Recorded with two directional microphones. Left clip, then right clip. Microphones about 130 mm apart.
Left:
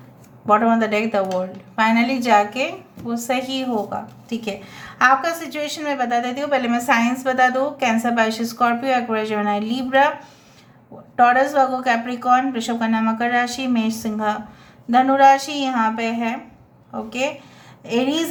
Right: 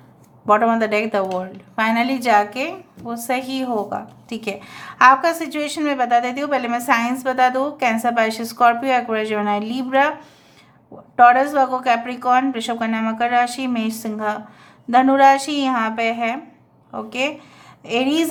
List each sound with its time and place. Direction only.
0.4 s a woman's voice: 45° right (ahead or behind)
6.6 s a woman's voice: 25° right (ahead or behind)
11.2 s a woman's voice: 35° right (ahead or behind)
14.8 s a woman's voice: 45° right (ahead or behind)